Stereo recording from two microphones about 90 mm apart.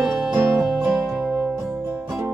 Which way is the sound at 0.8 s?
15° right (ahead or behind).